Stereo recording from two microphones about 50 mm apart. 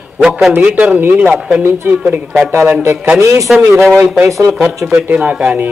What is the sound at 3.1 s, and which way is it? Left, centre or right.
A man's voice, right.